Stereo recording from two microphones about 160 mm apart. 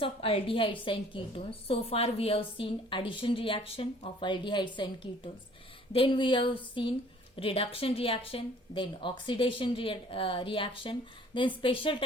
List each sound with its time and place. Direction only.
0.0 s a woman's voice: 35° left (ahead or behind)